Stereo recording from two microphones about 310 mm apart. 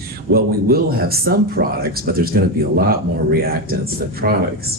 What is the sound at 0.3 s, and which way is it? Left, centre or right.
Speech, right.